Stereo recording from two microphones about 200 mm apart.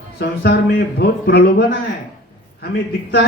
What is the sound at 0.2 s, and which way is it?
A man's voice, 55° left (ahead or behind).